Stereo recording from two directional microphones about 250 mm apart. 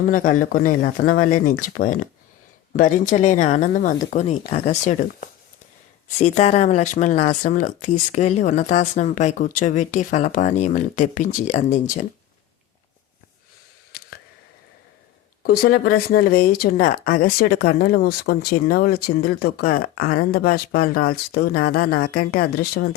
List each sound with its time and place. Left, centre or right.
0.1 s speech: left
13.9 s a sound: left
15.4 s speech: left